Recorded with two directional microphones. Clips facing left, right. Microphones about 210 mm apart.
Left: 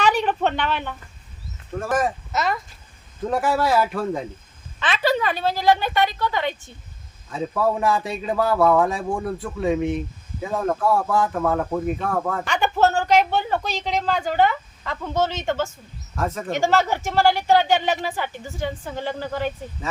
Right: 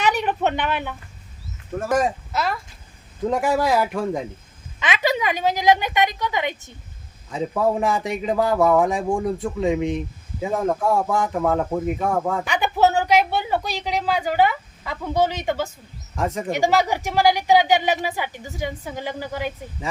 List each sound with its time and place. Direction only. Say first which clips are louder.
0.0 s a sound: left 1 dB; 10° right (ahead or behind)
1.9 s speech: right 2 dB; 15° right (ahead or behind)
2.3 s speech: left 1 dB; centre (ahead or behind)
3.2 s speech: right 1 dB; 15° right (ahead or behind)